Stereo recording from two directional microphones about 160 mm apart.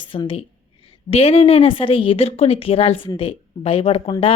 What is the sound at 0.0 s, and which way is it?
A woman's voice, 30° left (ahead or behind).